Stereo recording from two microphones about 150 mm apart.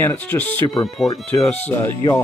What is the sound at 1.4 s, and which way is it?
Speech, 10° left (ahead or behind).